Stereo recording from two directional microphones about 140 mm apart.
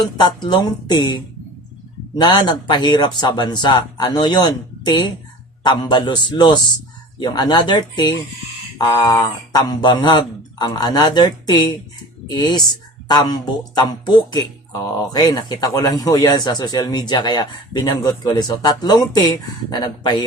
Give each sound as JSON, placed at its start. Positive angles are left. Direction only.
{"t": 0.2, "sound": "speech", "side_deg": 30}